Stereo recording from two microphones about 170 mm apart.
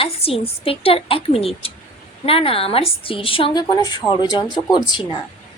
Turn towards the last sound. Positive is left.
turn(degrees=25)  # may be behind; listen again after turning